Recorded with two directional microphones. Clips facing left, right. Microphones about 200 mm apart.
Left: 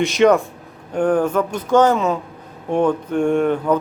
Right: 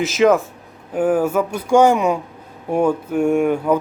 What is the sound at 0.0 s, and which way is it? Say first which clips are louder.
Speech: left 1 dB; centre (ahead or behind).